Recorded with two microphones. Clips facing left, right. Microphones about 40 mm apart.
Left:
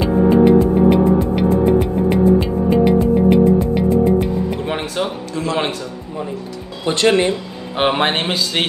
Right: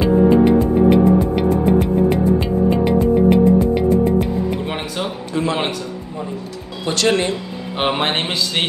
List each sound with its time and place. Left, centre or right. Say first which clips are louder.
0.0 s music: even; centre
5.3 s a man's voice: right 1 dB; right
6.8 s a man's voice: left 3 dB; centre